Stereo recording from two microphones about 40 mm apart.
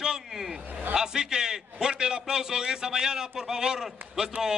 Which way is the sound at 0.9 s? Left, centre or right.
Centre.